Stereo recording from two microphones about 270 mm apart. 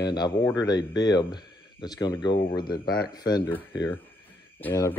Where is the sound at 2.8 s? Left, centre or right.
Left.